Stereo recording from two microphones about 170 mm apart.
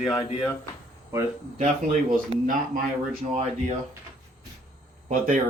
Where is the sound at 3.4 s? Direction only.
40° right (ahead or behind).